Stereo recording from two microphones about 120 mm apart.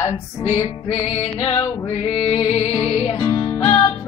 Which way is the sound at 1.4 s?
45° left (ahead or behind).